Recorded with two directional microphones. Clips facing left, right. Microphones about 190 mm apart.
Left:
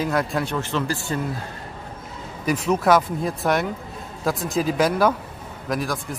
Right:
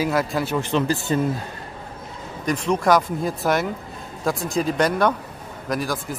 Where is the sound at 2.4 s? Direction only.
5° left (ahead or behind).